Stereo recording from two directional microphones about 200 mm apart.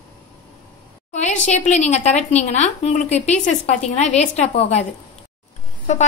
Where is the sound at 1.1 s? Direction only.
35° left (ahead or behind).